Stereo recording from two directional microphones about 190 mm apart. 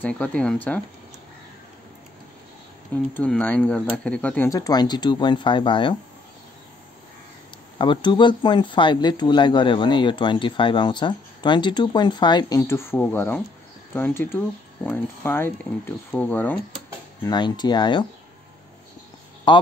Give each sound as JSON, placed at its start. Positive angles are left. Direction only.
{"t": 0.0, "sound": "speech", "side_deg": 5}
{"t": 3.2, "sound": "speech", "side_deg": 10}
{"t": 7.8, "sound": "speech", "side_deg": 25}
{"t": 17.2, "sound": "speech", "side_deg": 20}
{"t": 19.5, "sound": "a man's voice", "side_deg": 25}